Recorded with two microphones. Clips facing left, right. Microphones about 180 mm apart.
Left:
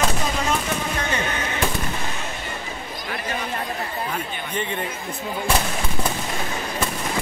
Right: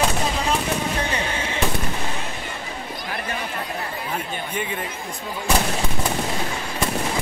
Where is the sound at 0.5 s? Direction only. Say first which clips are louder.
Right 1 dB; 30° right (ahead or behind).